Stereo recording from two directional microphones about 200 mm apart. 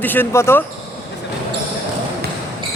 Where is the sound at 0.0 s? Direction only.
10° left (ahead or behind).